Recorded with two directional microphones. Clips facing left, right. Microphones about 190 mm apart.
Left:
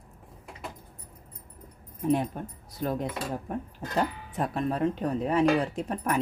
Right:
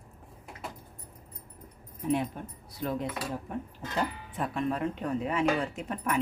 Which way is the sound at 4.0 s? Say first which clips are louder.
Left 3 dB; 40° left (ahead or behind).